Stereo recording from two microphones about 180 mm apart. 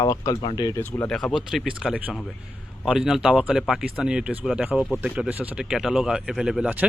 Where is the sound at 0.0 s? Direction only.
20° left (ahead or behind).